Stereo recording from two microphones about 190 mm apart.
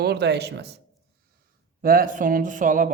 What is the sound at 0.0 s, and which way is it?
Speech, 60° right (ahead or behind).